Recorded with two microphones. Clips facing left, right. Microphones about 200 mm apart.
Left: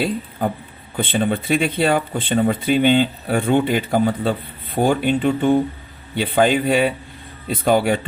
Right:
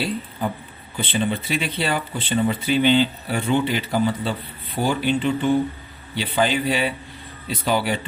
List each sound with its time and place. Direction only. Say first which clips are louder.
0.0 s speech: left 4 dB; 50° left (ahead or behind)